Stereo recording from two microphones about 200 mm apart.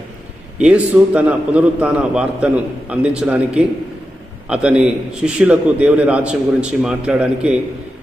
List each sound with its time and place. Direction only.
0.6 s a man's voice: 5° right (ahead or behind)